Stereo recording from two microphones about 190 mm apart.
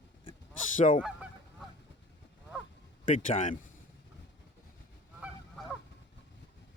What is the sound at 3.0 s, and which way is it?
Speech, 40° left (ahead or behind).